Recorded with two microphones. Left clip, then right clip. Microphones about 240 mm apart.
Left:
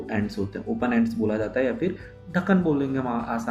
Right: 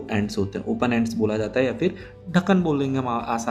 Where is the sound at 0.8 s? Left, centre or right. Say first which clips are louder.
Right 1 dB; right.